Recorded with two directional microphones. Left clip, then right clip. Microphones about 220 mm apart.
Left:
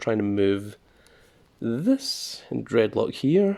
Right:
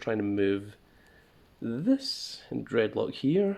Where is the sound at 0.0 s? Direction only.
50° left (ahead or behind).